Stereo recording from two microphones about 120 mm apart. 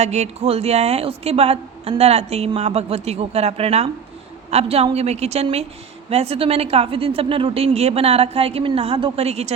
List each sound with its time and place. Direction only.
0.0 s a woman's voice: 70° right (ahead or behind)